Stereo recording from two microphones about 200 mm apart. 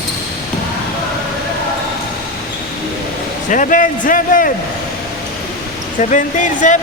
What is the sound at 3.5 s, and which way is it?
A man's voice, 40° left (ahead or behind).